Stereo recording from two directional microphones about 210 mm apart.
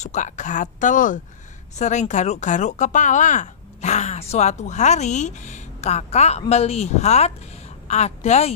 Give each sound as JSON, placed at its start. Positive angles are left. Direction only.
{"t": 0.0, "sound": "speech", "side_deg": 35}